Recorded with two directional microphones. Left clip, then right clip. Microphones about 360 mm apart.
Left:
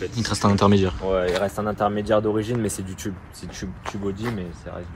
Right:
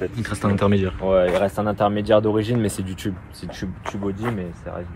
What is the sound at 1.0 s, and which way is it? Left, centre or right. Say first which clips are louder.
Speech: right 4 dB; centre.